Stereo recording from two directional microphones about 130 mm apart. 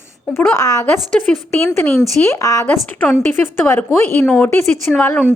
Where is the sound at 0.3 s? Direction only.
25° left (ahead or behind).